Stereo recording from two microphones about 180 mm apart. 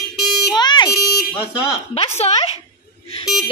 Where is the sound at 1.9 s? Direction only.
35° left (ahead or behind).